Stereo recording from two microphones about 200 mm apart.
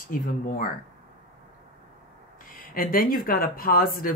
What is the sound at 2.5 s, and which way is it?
A woman's voice, 45° left (ahead or behind).